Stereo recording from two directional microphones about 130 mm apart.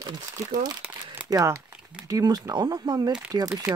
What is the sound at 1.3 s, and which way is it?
Speech, 25° right (ahead or behind).